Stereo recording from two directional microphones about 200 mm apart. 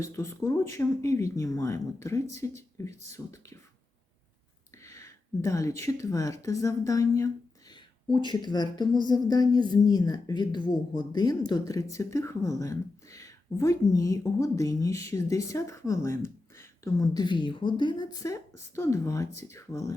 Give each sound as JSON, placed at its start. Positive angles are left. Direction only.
{"t": 0.0, "sound": "a woman's voice", "side_deg": 15}
{"t": 4.8, "sound": "a woman's voice", "side_deg": 15}